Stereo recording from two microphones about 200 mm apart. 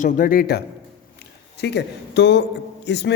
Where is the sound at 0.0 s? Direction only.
45° left (ahead or behind).